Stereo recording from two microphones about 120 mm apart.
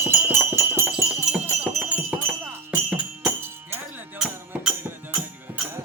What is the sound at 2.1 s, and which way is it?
Music, 15° right (ahead or behind).